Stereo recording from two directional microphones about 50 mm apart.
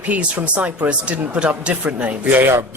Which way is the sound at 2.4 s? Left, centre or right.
Right.